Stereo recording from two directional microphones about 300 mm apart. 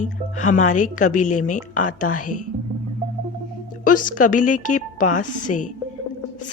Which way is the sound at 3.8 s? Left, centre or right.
Left.